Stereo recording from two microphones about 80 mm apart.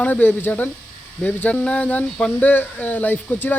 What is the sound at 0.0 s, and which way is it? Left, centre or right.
Speech, left.